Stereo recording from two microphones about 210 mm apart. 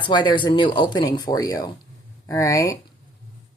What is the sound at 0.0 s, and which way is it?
Speech, 20° left (ahead or behind).